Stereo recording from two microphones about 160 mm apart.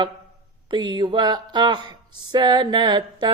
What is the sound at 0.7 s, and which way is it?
Speech, 30° right (ahead or behind).